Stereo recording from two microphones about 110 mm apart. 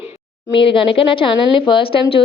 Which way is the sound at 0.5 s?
50° left (ahead or behind).